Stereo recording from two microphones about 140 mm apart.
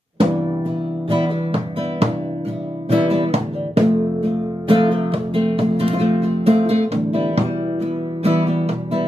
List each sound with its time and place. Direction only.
1.1 s music: 40° right (ahead or behind)